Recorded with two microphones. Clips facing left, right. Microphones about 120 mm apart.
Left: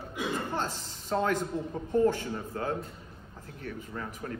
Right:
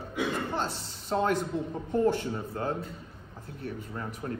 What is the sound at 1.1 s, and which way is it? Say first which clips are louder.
A man's voice: right 1 dB; 25° right (ahead or behind).